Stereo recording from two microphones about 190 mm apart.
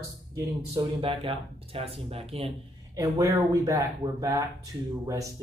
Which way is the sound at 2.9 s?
15° right (ahead or behind).